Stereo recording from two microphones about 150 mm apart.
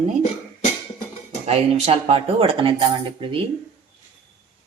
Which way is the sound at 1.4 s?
45° right (ahead or behind).